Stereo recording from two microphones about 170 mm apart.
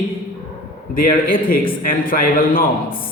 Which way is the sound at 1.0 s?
55° left (ahead or behind).